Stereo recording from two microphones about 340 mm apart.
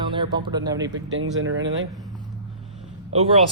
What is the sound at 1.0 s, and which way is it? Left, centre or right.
Speech, right.